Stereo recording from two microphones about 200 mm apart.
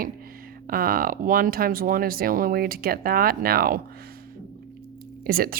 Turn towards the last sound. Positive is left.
turn(degrees=-50)  # may be behind; listen again after turning